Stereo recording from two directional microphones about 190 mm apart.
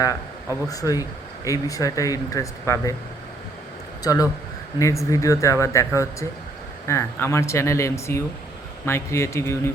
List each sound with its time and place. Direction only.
0.7 s speech: 20° left (ahead or behind)
4.0 s speech: 20° left (ahead or behind)